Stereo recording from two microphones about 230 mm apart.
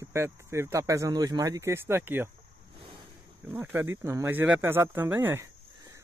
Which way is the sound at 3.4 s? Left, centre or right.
Centre.